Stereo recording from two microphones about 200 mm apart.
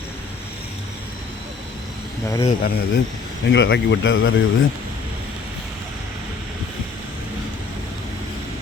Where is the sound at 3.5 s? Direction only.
60° left (ahead or behind); by 4.3 s 75° left (ahead or behind).